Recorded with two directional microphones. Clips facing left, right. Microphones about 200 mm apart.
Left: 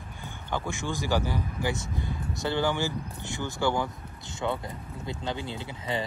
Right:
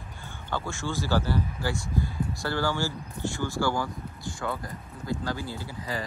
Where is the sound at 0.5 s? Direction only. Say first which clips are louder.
Even; 15° left (ahead or behind).